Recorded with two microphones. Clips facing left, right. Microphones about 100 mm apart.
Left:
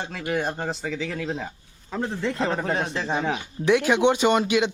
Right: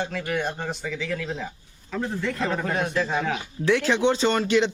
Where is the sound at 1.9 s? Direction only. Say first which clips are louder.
Left 1 dB; 25° left (ahead or behind).